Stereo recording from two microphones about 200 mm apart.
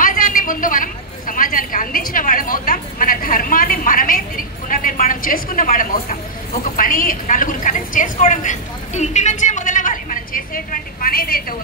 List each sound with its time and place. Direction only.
0.0 s a woman's voice: 45° left (ahead or behind)